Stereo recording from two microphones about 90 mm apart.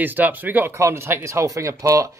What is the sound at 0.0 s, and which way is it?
Speech, 20° right (ahead or behind).